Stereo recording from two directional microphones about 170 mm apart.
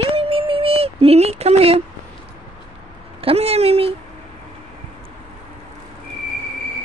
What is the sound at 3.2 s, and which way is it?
Speech, 35° right (ahead or behind).